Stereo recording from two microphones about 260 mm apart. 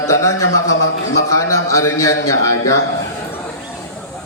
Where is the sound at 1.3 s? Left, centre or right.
Centre.